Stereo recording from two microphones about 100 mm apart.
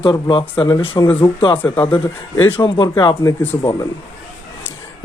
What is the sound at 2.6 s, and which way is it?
Speech, 50° left (ahead or behind).